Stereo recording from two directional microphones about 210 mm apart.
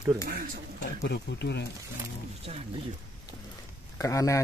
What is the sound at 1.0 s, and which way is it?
Speech, 50° left (ahead or behind).